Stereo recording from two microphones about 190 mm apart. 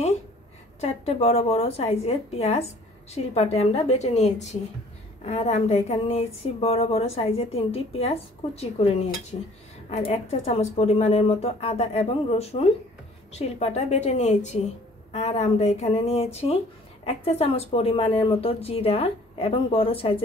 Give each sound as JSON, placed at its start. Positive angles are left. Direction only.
{"t": 0.7, "sound": "speech", "side_deg": 35}